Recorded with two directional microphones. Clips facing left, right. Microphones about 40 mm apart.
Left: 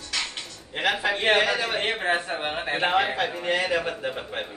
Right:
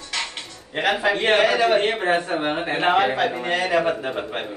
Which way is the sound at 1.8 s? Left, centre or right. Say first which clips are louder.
Right 4 dB; centre.